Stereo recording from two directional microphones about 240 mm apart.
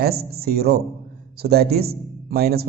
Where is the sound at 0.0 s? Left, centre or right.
Right.